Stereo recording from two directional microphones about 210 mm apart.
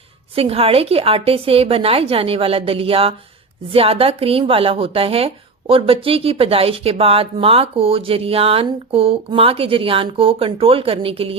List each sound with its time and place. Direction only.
0.3 s a woman's voice: 25° right (ahead or behind)